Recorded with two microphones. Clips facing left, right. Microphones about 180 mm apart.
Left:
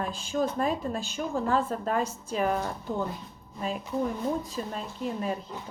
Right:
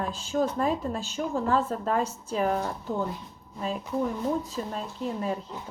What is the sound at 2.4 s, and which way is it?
Speech, 30° right (ahead or behind).